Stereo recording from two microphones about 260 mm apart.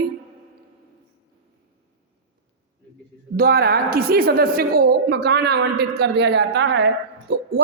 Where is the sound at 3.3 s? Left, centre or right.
Right.